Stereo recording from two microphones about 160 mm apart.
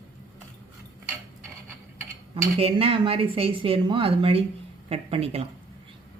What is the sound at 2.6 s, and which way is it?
Speech, 35° right (ahead or behind).